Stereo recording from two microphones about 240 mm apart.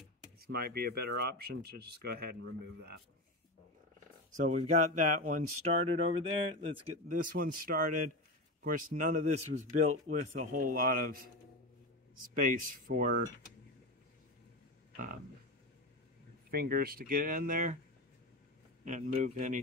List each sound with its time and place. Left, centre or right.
0.4 s speech: right
4.4 s speech: right
7.3 s speech: right
12.4 s speech: right
16.4 s speech: right
18.9 s speech: right